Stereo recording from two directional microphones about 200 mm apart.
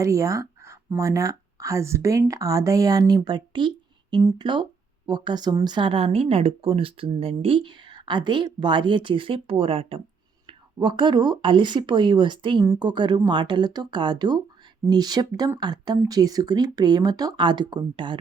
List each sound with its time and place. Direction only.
0.0 s speech: 15° right (ahead or behind)